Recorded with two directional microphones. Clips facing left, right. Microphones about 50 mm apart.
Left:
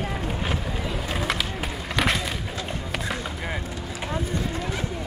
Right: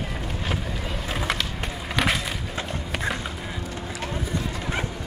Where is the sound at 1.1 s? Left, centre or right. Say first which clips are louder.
Right 1 dB; centre.